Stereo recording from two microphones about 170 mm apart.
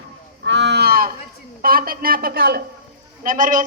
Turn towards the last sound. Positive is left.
turn(degrees=-50)  # may be behind; listen again after turning